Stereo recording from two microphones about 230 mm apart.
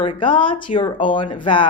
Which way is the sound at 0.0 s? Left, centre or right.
Left.